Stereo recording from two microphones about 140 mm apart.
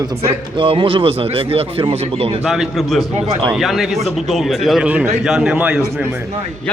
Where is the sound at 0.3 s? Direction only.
40° right (ahead or behind).